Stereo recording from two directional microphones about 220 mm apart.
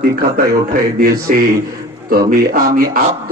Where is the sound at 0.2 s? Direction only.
40° right (ahead or behind).